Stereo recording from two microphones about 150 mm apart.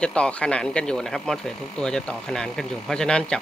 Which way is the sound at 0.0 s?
5° left (ahead or behind).